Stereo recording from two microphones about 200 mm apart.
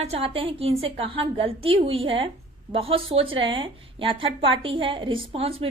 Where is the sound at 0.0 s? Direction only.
30° right (ahead or behind).